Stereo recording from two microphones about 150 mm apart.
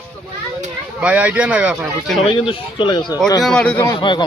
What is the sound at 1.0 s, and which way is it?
Speech, 10° right (ahead or behind).